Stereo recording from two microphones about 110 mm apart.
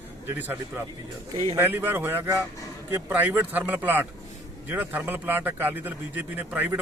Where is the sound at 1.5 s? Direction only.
20° right (ahead or behind).